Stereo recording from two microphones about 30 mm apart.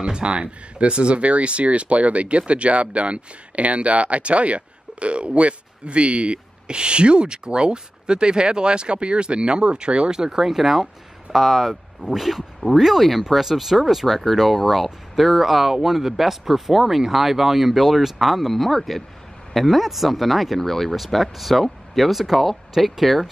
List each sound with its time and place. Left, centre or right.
0.0 s speech: right
10.4 s speech: centre